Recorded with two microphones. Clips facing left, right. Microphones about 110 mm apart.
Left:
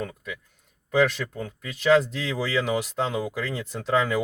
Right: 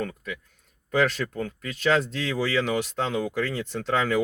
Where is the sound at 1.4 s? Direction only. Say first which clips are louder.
Right 3 dB; 10° left (ahead or behind).